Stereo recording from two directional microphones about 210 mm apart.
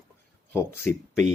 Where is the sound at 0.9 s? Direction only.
5° left (ahead or behind).